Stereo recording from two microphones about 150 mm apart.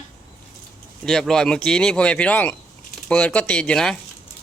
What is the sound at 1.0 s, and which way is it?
Speech, 5° left (ahead or behind).